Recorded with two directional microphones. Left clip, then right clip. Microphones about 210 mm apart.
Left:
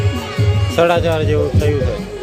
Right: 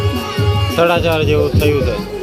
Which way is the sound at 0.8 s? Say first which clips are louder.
Even; centre (ahead or behind).